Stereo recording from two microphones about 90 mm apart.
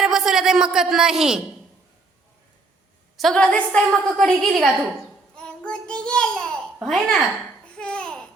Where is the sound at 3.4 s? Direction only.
15° left (ahead or behind).